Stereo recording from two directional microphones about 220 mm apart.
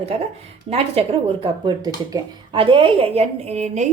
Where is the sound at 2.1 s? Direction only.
25° right (ahead or behind).